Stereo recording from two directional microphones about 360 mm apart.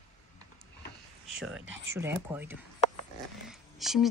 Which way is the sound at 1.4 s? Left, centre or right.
Centre.